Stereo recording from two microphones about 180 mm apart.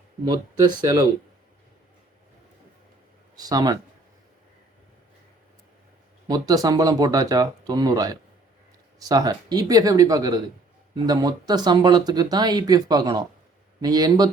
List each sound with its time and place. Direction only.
0.3 s speech: 20° right (ahead or behind)
3.3 s speech: 20° right (ahead or behind)
6.2 s speech: 20° right (ahead or behind)